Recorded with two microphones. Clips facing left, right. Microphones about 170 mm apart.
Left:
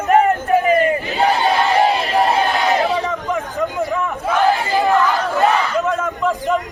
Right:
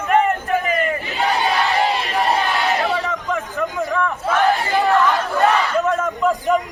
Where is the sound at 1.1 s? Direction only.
40° left (ahead or behind).